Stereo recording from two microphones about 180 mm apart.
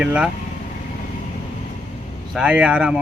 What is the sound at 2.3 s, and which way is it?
Speech, 5° right (ahead or behind).